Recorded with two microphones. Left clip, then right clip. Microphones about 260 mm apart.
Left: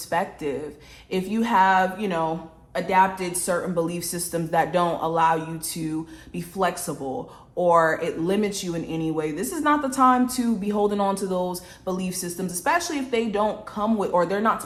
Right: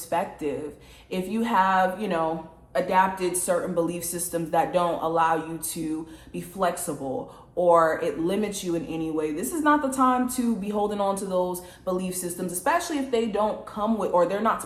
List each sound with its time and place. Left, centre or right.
0.1 s speech: left